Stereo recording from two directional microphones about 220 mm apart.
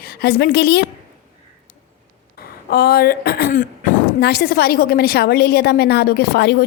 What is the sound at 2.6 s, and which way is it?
Speech, 45° left (ahead or behind).